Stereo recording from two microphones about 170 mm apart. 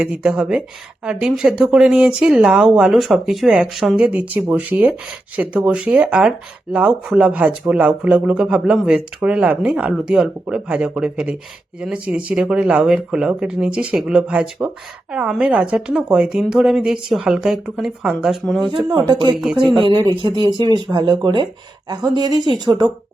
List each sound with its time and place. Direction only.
0.0 s a woman's voice: 5° right (ahead or behind)
18.9 s speech: 25° right (ahead or behind)
19.3 s a woman's voice: 5° right (ahead or behind)
19.7 s speech: 25° right (ahead or behind)